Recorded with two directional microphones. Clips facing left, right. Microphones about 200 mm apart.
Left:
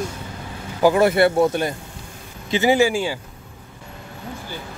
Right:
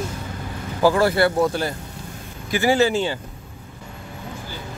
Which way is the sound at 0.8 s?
20° left (ahead or behind).